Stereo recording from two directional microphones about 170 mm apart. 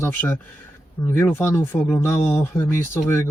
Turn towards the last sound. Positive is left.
turn(degrees=15)  # may be behind; listen again after turning